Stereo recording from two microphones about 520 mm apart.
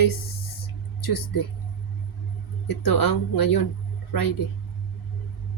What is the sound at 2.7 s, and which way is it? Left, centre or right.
Speech, left.